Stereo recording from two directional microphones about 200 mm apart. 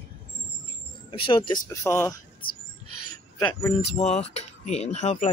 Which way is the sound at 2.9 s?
90° left.